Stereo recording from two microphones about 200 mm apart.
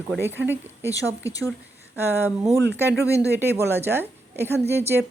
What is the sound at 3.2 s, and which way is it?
A woman's voice, 10° right (ahead or behind).